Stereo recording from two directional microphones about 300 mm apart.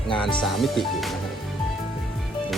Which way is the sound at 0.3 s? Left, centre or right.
Centre.